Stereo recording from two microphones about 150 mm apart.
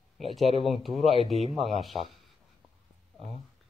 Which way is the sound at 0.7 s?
Centre (ahead or behind).